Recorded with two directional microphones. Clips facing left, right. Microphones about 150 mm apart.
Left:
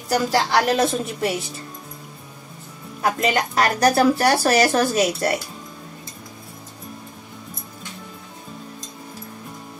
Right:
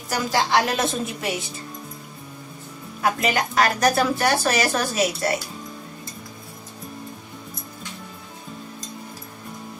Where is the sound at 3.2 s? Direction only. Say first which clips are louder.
Left 2 dB; 35° left (ahead or behind).